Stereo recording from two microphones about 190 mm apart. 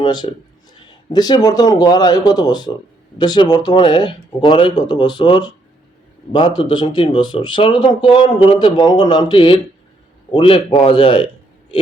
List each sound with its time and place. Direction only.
0.0 s speech: 25° left (ahead or behind)
6.6 s speech: 25° left (ahead or behind)